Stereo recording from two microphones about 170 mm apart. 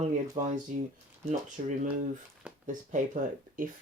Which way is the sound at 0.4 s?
55° right (ahead or behind).